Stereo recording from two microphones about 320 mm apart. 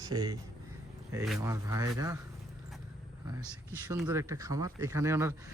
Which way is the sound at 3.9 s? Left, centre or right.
Centre.